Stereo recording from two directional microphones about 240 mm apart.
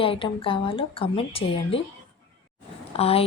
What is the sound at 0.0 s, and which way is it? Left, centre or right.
A woman's voice, left.